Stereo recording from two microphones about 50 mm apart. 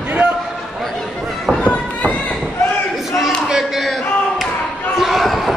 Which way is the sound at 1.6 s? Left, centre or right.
Left.